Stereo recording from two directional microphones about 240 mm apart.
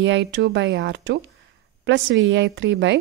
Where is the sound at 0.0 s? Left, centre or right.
Right.